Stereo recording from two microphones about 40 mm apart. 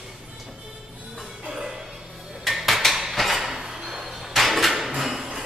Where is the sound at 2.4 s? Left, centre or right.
Centre.